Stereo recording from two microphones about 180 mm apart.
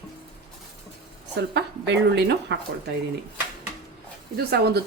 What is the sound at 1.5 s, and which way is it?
A woman's voice, 70° right (ahead or behind).